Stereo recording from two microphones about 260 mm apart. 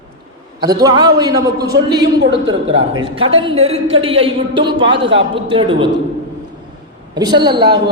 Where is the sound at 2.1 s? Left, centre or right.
Right.